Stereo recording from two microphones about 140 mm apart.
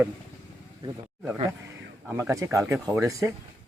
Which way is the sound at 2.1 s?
20° right (ahead or behind).